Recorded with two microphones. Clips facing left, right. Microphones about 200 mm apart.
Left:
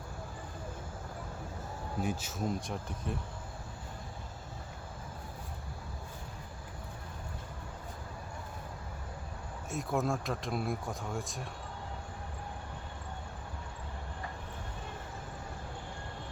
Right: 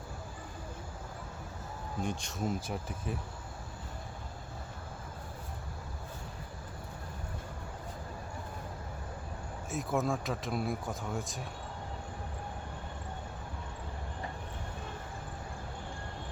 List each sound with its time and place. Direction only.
2.0 s speech: 5° left (ahead or behind)
9.6 s speech: centre (ahead or behind)